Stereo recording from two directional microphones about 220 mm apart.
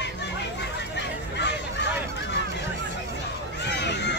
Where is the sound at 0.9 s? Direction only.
50° left (ahead or behind).